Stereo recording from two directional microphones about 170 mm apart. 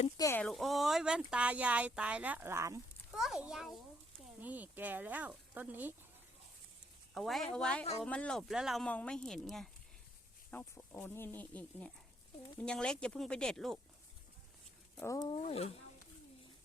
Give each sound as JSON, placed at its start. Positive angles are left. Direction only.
{"t": 0.2, "sound": "speech", "side_deg": 15}
{"t": 0.4, "sound": "speech", "side_deg": 0}
{"t": 3.2, "sound": "speech", "side_deg": 0}
{"t": 7.1, "sound": "speech", "side_deg": 0}
{"t": 15.0, "sound": "speech", "side_deg": 20}
{"t": 15.4, "sound": "speech", "side_deg": 35}